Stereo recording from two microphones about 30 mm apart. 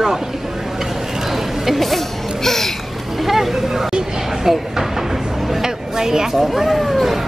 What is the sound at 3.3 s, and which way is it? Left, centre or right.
Vehicle, centre.